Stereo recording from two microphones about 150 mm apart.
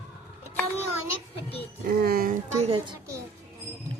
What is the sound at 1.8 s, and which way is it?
Speech, 90° right.